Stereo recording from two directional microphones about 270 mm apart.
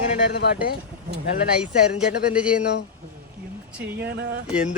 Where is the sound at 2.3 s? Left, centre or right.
Centre.